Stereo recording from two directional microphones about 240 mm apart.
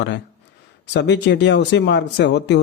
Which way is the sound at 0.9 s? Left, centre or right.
Left.